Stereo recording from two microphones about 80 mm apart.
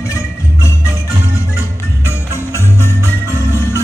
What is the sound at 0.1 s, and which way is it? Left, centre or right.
Music, left.